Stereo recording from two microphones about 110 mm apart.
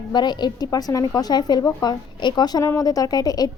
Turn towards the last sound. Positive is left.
turn(degrees=35)  # may be behind; listen again after turning